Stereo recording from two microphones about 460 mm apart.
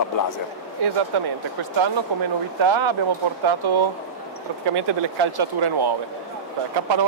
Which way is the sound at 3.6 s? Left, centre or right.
Right.